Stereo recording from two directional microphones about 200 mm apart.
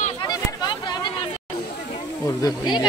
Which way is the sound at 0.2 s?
20° left (ahead or behind).